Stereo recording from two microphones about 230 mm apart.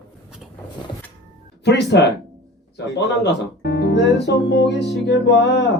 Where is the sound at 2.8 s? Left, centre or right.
Left.